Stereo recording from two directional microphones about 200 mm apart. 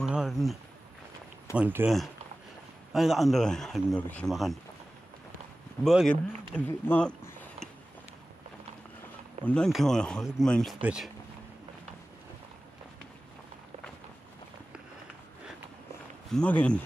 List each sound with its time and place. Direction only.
0.0 s a sound: 5° right (ahead or behind)
1.6 s speech: 10° right (ahead or behind)
5.9 s speech: centre (ahead or behind)
6.5 s a sound: 5° left (ahead or behind)
9.4 s speech: 5° left (ahead or behind)
16.3 s speech: 5° left (ahead or behind)